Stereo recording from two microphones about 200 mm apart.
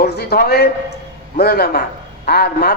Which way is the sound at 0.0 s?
50° left (ahead or behind).